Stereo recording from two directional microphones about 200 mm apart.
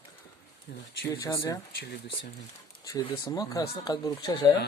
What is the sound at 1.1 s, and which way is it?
Speech, 15° left (ahead or behind).